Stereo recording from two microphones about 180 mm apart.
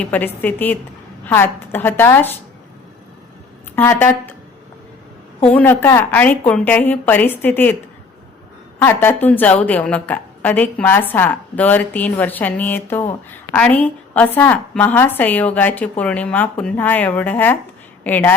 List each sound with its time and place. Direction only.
0.0 s a woman's voice: 10° left (ahead or behind)
3.8 s a woman's voice: 10° left (ahead or behind)
5.5 s a woman's voice: 10° left (ahead or behind)
8.8 s a woman's voice: 15° left (ahead or behind)